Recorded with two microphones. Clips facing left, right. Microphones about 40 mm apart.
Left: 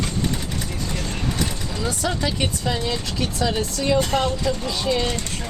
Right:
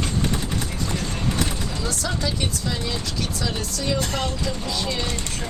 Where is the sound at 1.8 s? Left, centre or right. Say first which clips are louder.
Left 4 dB; left.